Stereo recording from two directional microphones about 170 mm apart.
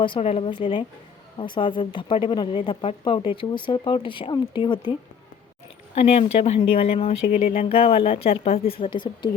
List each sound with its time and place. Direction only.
0.0 s speech: 30° left (ahead or behind)